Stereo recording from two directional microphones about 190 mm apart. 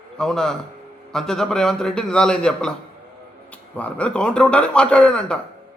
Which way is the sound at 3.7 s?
5° left (ahead or behind).